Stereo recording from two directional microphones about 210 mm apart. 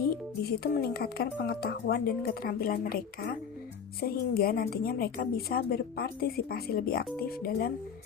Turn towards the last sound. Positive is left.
turn(degrees=45)  # may be behind; listen again after turning